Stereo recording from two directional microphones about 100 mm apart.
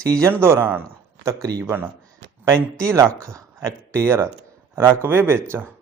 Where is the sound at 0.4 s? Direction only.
25° right (ahead or behind).